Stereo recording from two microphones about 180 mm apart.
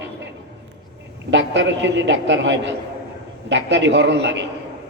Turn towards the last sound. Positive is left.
turn(degrees=-75)  # may be behind; listen again after turning